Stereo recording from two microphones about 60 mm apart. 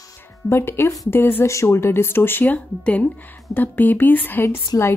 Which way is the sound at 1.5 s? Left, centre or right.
Left.